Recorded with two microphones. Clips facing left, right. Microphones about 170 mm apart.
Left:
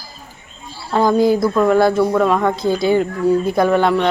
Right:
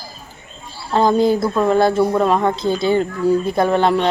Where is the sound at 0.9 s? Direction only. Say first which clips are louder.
Left 1 dB; 25° right (ahead or behind).